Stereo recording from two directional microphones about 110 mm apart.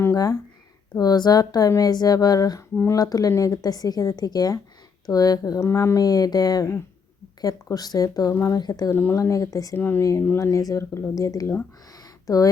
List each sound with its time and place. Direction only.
0.0 s a sound: 30° left (ahead or behind)
0.9 s a woman's voice: 40° left (ahead or behind)
8.5 s a woman's voice: 35° left (ahead or behind)
8.9 s speech: 20° left (ahead or behind)
9.7 s speech: 20° left (ahead or behind)